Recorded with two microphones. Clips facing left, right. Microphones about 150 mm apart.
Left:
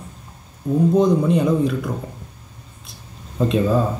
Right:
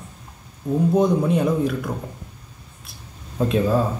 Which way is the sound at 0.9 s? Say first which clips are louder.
Left 2 dB; 5° right (ahead or behind).